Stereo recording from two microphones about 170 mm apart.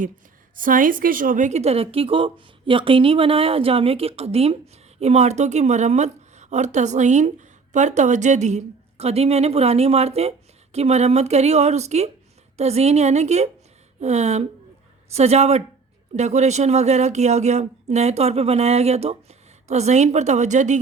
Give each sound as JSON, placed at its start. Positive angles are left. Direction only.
{"t": 0.5, "sound": "a woman's voice", "side_deg": -55}